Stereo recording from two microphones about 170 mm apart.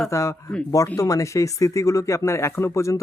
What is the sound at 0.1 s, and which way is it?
A woman's voice, 15° left (ahead or behind).